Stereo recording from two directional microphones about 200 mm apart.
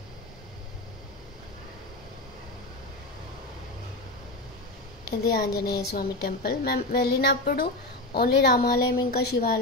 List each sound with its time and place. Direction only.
5.3 s speech: 50° left (ahead or behind)